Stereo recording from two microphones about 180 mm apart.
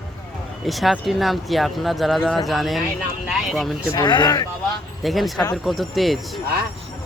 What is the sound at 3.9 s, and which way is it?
Speech, 25° left (ahead or behind).